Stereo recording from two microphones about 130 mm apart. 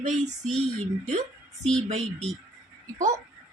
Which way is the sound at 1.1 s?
60° right (ahead or behind).